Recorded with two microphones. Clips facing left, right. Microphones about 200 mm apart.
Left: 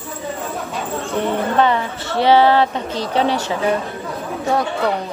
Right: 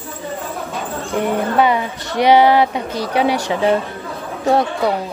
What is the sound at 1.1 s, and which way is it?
Speech, 10° right (ahead or behind).